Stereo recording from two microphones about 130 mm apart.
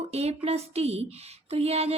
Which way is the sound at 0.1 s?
55° right (ahead or behind).